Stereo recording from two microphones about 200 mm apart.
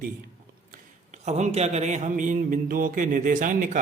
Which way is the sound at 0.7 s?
35° right (ahead or behind).